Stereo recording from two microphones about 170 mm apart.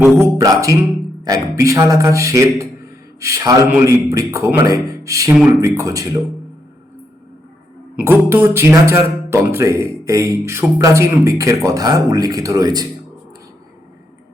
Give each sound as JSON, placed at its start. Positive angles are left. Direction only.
{"t": 0.0, "sound": "a man's voice", "side_deg": -15}
{"t": 7.9, "sound": "speech", "side_deg": -10}